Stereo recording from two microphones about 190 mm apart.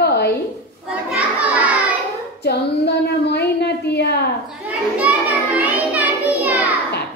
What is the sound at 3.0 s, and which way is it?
A woman's voice, 60° left (ahead or behind).